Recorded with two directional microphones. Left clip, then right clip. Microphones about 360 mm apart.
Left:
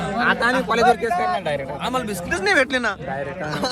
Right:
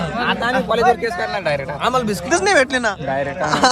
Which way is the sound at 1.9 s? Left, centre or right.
Centre.